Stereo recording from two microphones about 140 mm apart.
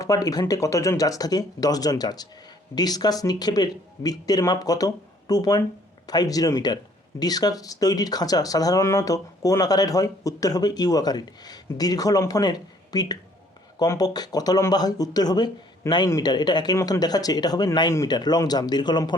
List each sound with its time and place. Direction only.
0.0 s speech: 25° left (ahead or behind)